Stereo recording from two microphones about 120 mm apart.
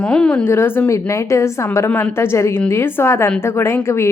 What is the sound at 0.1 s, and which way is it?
Speech, 5° left (ahead or behind).